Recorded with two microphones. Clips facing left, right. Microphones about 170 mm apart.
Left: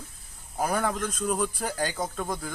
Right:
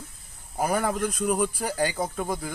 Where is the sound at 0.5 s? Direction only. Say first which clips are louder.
Right 2 dB; 5° right (ahead or behind).